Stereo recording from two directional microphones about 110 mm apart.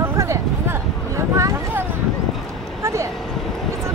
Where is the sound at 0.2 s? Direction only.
25° right (ahead or behind).